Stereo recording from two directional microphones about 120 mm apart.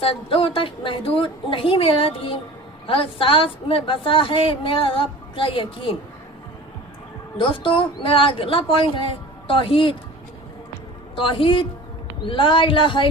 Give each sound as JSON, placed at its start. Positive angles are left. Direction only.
{"t": 0.0, "sound": "a woman's voice", "side_deg": 50}
{"t": 7.3, "sound": "a woman's voice", "side_deg": 45}
{"t": 11.1, "sound": "a woman's voice", "side_deg": 45}